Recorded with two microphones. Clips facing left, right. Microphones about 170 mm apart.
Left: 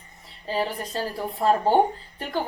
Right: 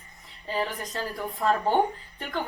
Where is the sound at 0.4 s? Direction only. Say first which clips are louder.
Left 3 dB; 35° left (ahead or behind).